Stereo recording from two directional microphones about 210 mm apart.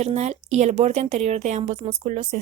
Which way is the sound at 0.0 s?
30° right (ahead or behind).